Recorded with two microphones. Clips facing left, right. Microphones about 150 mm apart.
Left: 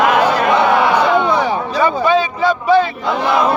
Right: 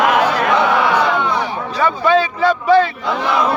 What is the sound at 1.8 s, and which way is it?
Speech, 10° left (ahead or behind).